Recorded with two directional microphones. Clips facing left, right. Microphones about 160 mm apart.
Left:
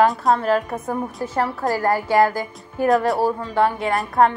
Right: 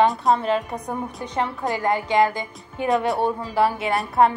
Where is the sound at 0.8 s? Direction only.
20° right (ahead or behind).